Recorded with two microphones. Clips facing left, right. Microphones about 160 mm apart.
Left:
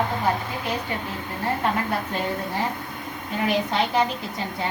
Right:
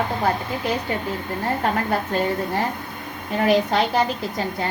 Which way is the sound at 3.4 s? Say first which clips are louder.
Right 5 dB; 40° right (ahead or behind).